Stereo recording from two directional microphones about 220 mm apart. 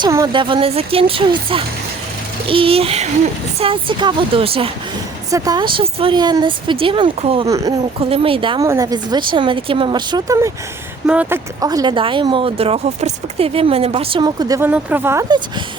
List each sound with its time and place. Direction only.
0.0 s speech: 20° right (ahead or behind)